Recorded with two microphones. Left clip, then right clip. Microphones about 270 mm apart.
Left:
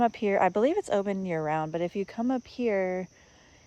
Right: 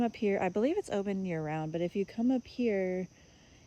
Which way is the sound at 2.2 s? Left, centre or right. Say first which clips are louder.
Left 3 dB; left.